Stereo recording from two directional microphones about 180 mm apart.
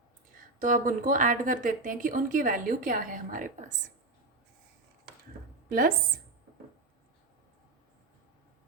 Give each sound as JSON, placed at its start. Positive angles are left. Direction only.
{"t": 0.6, "sound": "a woman's voice", "side_deg": -50}